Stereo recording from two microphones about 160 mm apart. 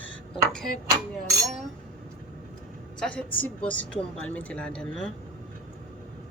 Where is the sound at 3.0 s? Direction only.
10° left (ahead or behind).